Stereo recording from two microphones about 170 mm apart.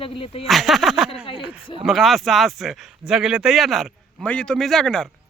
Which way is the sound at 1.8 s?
Centre (ahead or behind).